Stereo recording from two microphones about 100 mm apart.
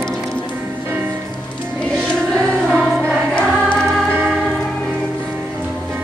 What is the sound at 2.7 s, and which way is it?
Music, 15° right (ahead or behind).